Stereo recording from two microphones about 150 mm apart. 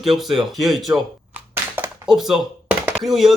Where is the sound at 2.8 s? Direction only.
Centre (ahead or behind).